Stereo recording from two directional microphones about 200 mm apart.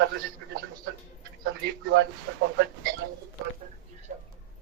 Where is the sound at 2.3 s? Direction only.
65° right (ahead or behind).